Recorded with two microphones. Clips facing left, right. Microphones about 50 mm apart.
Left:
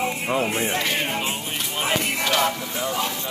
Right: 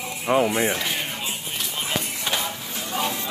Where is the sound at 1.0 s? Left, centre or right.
Left.